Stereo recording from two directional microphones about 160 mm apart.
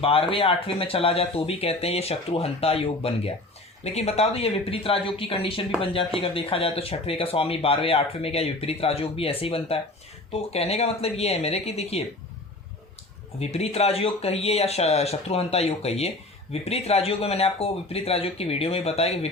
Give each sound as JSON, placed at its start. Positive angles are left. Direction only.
{"t": 0.0, "sound": "speech", "side_deg": 35}
{"t": 13.4, "sound": "speech", "side_deg": 40}